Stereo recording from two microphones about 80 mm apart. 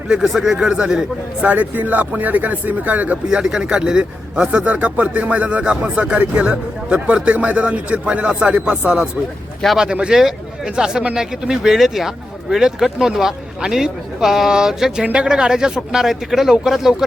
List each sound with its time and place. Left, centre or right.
0.1 s speech: centre
3.2 s a man's voice: centre